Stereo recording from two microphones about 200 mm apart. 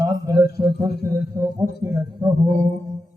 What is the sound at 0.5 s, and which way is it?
Mantra, 15° right (ahead or behind).